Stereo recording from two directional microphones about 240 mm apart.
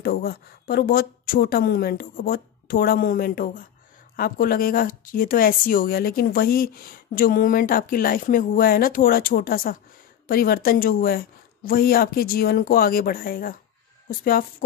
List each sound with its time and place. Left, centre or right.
0.0 s speech: left